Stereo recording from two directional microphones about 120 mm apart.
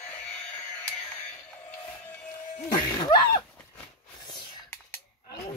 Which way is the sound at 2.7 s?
40° left (ahead or behind).